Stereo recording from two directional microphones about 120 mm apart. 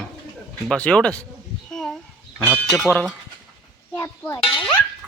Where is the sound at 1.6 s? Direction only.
5° left (ahead or behind).